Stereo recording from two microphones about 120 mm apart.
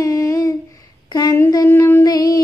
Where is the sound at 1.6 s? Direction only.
20° left (ahead or behind).